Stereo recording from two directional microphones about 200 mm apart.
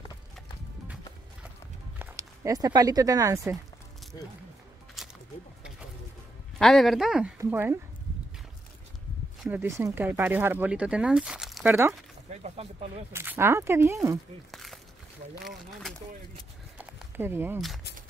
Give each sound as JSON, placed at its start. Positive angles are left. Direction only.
{"t": 2.0, "sound": "speech", "side_deg": -15}
{"t": 5.0, "sound": "a sound", "side_deg": 0}
{"t": 6.6, "sound": "speech", "side_deg": 0}
{"t": 9.4, "sound": "speech", "side_deg": -10}
{"t": 12.3, "sound": "speech", "side_deg": -35}
{"t": 13.1, "sound": "speech", "side_deg": -10}
{"t": 14.5, "sound": "a sound", "side_deg": 0}
{"t": 15.3, "sound": "speech", "side_deg": 0}
{"t": 16.7, "sound": "a sound", "side_deg": -10}